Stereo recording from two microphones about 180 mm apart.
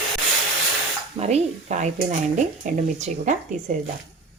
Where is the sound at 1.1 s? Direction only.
35° right (ahead or behind).